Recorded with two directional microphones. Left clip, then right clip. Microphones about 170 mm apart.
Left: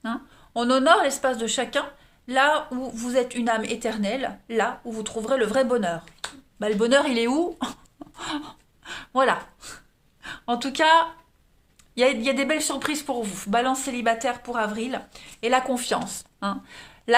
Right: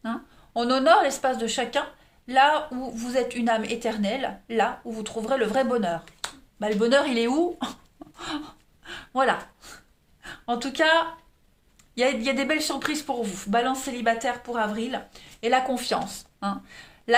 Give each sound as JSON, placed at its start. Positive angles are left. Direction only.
{"t": 0.0, "sound": "speech", "side_deg": 35}
{"t": 6.2, "sound": "finger snapping", "side_deg": 0}
{"t": 6.6, "sound": "speech", "side_deg": 35}